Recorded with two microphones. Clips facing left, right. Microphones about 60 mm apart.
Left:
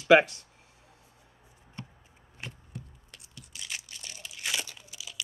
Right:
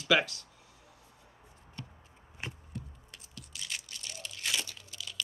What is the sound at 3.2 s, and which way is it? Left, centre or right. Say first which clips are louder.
Crunch: even; centre.